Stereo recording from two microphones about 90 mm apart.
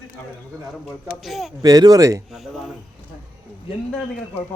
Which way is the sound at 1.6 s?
45° right (ahead or behind).